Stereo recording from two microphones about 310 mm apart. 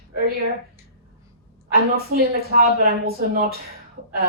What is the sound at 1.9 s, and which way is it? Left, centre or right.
A woman's voice, right.